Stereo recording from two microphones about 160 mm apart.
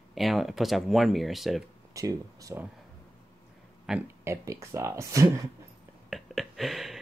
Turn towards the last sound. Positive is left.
turn(degrees=0)  # may be behind; listen again after turning